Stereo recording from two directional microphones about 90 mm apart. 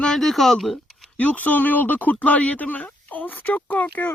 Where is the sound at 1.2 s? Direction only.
15° left (ahead or behind).